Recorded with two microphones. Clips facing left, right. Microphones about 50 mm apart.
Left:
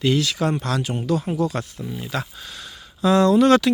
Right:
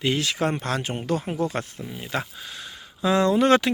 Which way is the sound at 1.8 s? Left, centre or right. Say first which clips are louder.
Left 2 dB; centre.